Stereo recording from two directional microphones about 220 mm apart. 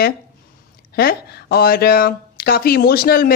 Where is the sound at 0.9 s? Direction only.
45° left (ahead or behind).